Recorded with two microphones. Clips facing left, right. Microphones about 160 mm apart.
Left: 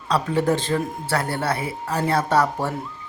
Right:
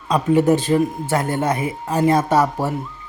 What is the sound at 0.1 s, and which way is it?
Speech, 15° right (ahead or behind).